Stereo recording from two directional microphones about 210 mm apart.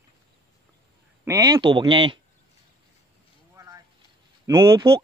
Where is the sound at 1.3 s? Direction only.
15° right (ahead or behind).